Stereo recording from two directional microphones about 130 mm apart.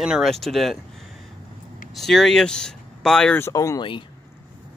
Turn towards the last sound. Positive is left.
turn(degrees=25)  # may be behind; listen again after turning